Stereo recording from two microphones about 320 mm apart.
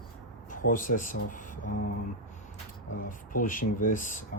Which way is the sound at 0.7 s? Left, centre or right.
Left.